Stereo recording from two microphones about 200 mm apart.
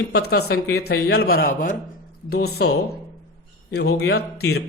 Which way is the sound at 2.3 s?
55° left (ahead or behind).